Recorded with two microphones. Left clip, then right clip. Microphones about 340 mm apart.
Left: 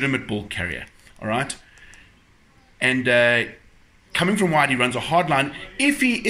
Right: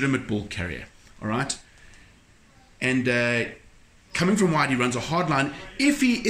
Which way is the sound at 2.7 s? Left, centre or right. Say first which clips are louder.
Left 6 dB; centre.